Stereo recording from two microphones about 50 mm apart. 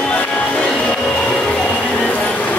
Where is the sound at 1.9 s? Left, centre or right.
Left.